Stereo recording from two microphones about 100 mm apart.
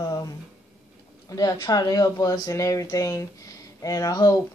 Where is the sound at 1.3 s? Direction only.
40° left (ahead or behind).